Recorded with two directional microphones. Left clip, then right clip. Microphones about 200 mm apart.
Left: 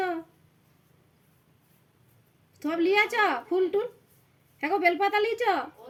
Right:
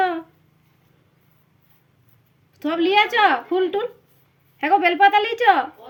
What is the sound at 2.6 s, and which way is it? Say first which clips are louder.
A woman's voice: right 6 dB; 15° left (ahead or behind).